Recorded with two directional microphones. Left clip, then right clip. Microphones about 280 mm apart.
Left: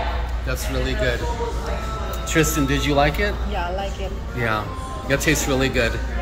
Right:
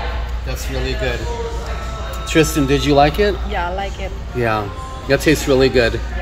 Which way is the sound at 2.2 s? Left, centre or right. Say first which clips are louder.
Right 5 dB; right.